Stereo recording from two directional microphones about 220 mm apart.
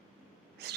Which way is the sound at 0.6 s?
50° right (ahead or behind).